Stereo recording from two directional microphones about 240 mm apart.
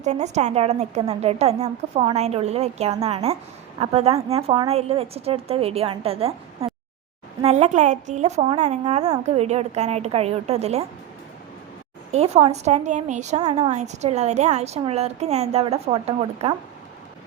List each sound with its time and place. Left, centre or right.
0.0 s a woman's voice: right
12.1 s a woman's voice: right